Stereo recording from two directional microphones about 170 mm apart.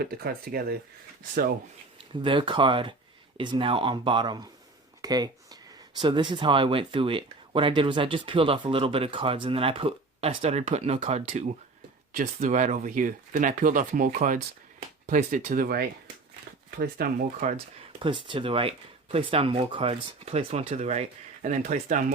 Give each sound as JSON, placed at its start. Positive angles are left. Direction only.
{"t": 0.0, "sound": "speech", "side_deg": -65}
{"t": 2.2, "sound": "speech", "side_deg": -30}
{"t": 18.0, "sound": "speech", "side_deg": -30}